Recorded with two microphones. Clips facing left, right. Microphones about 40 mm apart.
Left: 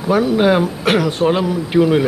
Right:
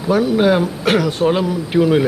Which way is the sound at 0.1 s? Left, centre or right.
Centre.